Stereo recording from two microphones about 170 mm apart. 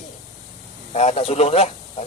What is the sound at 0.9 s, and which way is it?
A man's voice, 40° left (ahead or behind).